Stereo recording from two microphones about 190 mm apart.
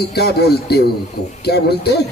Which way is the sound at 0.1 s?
60° left (ahead or behind).